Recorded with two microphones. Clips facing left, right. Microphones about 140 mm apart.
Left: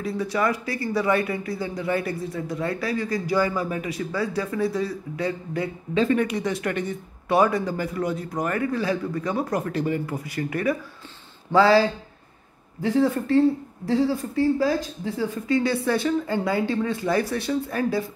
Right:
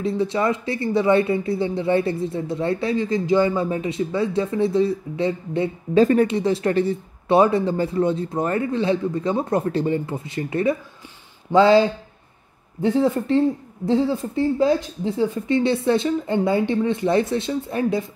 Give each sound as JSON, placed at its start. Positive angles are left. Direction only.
{"t": 0.0, "sound": "speech", "side_deg": -25}
{"t": 5.9, "sound": "speech", "side_deg": -40}
{"t": 6.2, "sound": "speech", "side_deg": -30}